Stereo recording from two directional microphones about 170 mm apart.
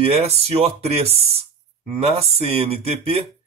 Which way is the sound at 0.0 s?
35° right (ahead or behind).